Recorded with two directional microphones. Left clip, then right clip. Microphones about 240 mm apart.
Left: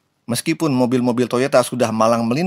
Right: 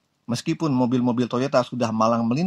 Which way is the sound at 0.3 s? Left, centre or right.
Left.